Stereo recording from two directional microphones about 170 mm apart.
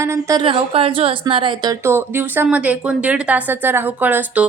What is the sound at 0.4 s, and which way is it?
Speech, 30° right (ahead or behind).